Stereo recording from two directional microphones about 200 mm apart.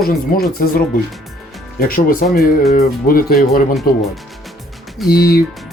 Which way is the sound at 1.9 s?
45° left (ahead or behind).